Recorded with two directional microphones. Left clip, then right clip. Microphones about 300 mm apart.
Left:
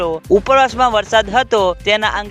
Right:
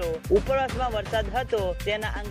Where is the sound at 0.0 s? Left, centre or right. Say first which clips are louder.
Left 10 dB; left.